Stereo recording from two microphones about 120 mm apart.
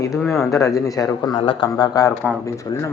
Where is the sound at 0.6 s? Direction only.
30° left (ahead or behind).